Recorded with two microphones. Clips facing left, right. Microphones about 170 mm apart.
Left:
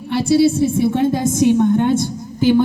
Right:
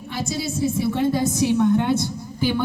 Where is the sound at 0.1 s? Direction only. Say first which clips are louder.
Left 13 dB; 65° left (ahead or behind).